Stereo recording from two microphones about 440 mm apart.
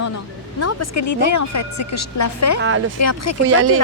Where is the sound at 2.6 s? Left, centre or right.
Right.